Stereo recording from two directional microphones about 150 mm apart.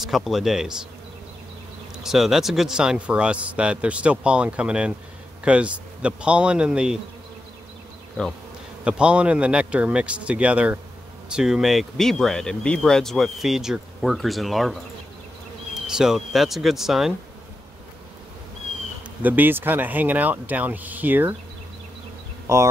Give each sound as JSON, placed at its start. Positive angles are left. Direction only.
{"t": 0.0, "sound": "speech", "side_deg": 0}
{"t": 2.0, "sound": "speech", "side_deg": 0}
{"t": 8.8, "sound": "speech", "side_deg": -5}
{"t": 19.2, "sound": "speech", "side_deg": -10}
{"t": 22.5, "sound": "speech", "side_deg": -20}